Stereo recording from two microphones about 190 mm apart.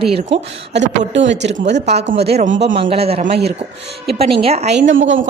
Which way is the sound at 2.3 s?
35° right (ahead or behind).